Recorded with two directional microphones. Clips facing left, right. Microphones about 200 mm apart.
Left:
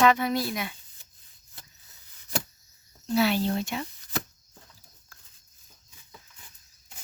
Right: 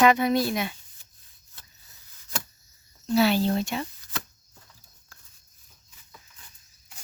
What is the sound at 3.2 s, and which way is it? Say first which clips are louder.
Speech: right 3 dB; 35° right (ahead or behind).